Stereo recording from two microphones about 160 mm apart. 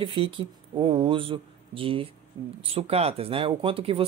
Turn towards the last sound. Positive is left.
turn(degrees=-35)  # may be behind; listen again after turning